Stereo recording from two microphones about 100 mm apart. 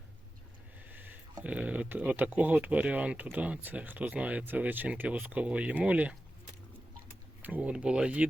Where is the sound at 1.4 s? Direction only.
10° right (ahead or behind).